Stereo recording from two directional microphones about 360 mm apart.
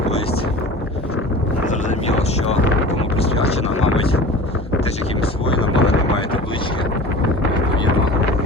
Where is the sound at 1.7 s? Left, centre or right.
Centre.